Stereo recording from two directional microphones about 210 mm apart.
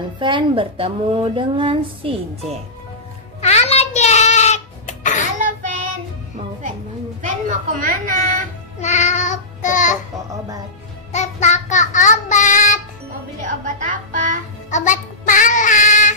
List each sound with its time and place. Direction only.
0.2 s speech: 20° right (ahead or behind)
3.3 s a sound: 30° left (ahead or behind)
7.2 s a sound: 35° right (ahead or behind)
8.8 s child singing: 35° left (ahead or behind)
11.1 s child singing: 35° left (ahead or behind)
13.4 s speech: 40° right (ahead or behind)
14.7 s child singing: 35° left (ahead or behind)